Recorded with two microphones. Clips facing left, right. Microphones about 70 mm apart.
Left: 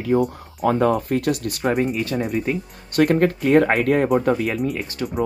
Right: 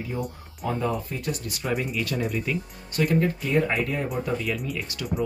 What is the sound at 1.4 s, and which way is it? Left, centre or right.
Speech, left.